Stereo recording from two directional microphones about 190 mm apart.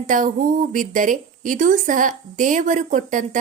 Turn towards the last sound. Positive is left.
turn(degrees=-40)  # may be behind; listen again after turning